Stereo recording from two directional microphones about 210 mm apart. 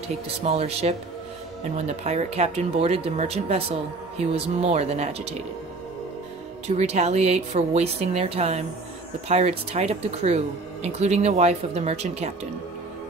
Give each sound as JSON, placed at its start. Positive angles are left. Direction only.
{"t": 0.1, "sound": "speech", "side_deg": -30}
{"t": 6.7, "sound": "speech", "side_deg": -30}